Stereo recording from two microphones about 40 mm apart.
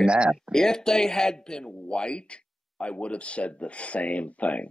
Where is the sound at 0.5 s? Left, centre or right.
Centre.